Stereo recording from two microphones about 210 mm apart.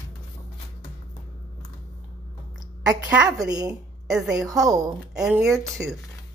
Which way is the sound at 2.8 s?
5° right (ahead or behind).